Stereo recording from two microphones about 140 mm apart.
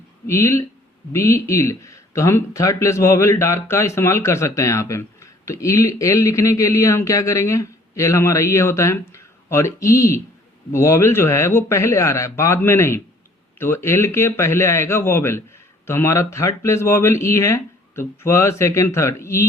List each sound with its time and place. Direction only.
0.3 s speech: 20° left (ahead or behind)